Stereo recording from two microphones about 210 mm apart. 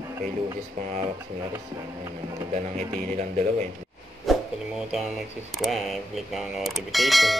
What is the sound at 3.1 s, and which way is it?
Speech, 35° right (ahead or behind).